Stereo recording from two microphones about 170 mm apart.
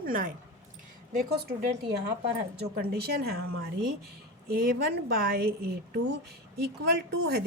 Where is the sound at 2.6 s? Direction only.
65° right (ahead or behind).